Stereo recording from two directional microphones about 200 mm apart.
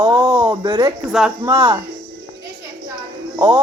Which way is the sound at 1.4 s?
25° right (ahead or behind).